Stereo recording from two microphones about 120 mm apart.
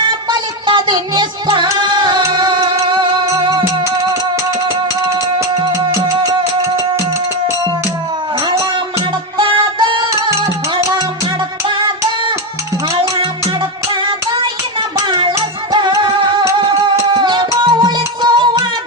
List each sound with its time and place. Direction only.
0.0 s music: 40° right (ahead or behind)
5.0 s music: 25° right (ahead or behind)
9.4 s music: 45° right (ahead or behind)
11.7 s music: 40° right (ahead or behind)